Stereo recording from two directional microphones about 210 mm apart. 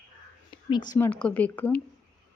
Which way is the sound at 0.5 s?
25° left (ahead or behind).